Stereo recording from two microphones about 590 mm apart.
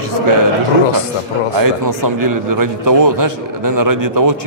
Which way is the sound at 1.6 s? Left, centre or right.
Right.